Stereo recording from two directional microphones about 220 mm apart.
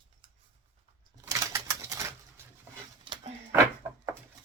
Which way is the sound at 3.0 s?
20° right (ahead or behind).